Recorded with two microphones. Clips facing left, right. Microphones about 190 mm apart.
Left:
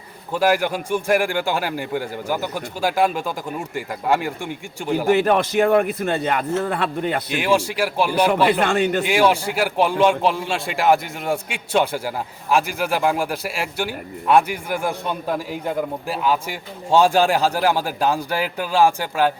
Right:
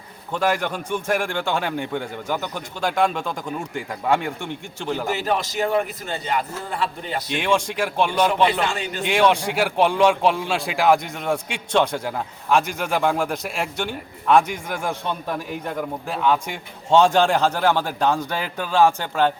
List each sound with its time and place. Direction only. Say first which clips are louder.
0.3 s a man's voice: left 4 dB; 5° left (ahead or behind)
5.0 s a man's voice: left 9 dB; 55° left (ahead or behind)
7.3 s a man's voice: right 1 dB; 5° left (ahead or behind)
8.6 s a man's voice: left 7 dB; 55° left (ahead or behind)
9.0 s a man's voice: left 1 dB; 5° left (ahead or behind)